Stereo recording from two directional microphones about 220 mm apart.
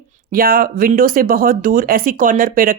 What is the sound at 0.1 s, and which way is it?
Speech, 40° right (ahead or behind).